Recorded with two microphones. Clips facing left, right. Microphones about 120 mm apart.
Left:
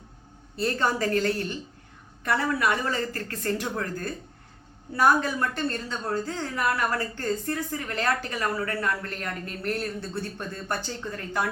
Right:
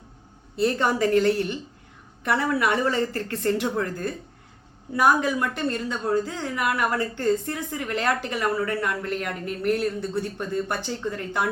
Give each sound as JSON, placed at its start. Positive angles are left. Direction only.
{"t": 0.5, "sound": "a woman's voice", "side_deg": -20}